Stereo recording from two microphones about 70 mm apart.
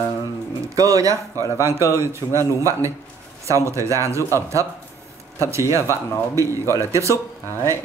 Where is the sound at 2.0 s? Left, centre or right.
Right.